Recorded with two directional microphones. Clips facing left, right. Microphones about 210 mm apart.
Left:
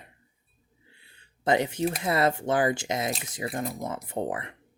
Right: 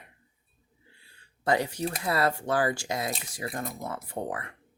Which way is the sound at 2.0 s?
20° left (ahead or behind).